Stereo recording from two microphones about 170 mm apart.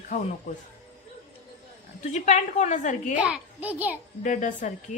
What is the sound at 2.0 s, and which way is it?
A woman's voice, 45° left (ahead or behind).